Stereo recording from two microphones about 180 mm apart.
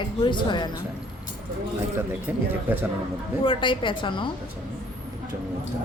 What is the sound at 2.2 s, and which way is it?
Speech, 10° right (ahead or behind).